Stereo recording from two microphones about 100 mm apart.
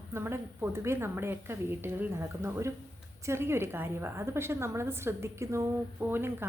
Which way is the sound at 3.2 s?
25° right (ahead or behind).